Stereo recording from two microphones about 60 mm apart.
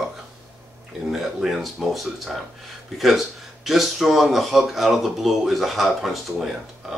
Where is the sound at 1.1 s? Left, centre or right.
Centre.